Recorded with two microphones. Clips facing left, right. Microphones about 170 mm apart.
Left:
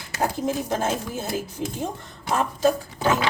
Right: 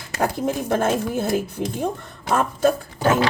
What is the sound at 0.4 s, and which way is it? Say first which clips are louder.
Speech: right 6 dB; 55° right (ahead or behind).